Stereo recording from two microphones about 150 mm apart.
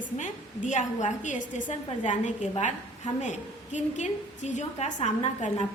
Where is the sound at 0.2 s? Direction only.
55° left (ahead or behind).